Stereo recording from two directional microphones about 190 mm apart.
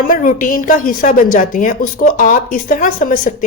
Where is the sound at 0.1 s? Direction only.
45° left (ahead or behind).